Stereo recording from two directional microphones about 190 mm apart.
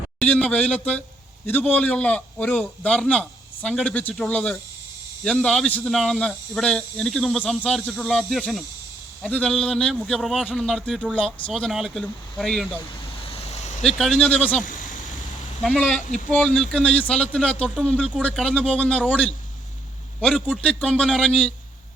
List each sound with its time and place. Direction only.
0.2 s a man's voice: 5° left (ahead or behind)
13.3 s vehicle: 35° left (ahead or behind)
13.8 s speech: 5° left (ahead or behind)
14.6 s a sound: 45° left (ahead or behind)
15.6 s a man's voice: 5° left (ahead or behind)